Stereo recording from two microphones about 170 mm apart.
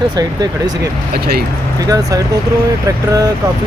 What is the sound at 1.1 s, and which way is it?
Speech, 65° right (ahead or behind).